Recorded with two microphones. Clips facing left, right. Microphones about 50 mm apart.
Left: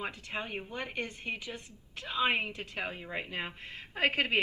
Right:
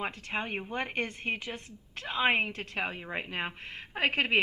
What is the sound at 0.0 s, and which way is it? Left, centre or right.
A woman's voice, right.